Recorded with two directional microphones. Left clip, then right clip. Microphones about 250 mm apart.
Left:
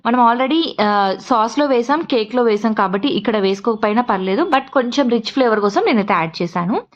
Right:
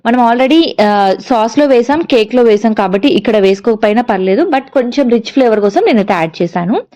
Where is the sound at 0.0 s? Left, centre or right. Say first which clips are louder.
Right 4 dB; centre.